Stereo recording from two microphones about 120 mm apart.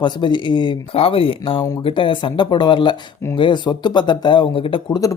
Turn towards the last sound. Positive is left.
turn(degrees=45)  # may be behind; listen again after turning